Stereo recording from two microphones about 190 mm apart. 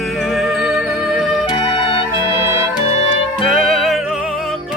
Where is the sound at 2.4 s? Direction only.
10° right (ahead or behind).